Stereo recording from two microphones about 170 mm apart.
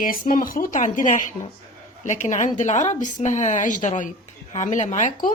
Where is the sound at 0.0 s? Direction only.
55° left (ahead or behind).